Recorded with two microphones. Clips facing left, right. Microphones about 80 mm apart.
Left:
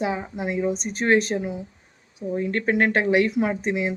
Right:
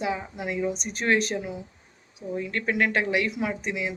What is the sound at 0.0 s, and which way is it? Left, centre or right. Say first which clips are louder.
Speech: left 3 dB; left.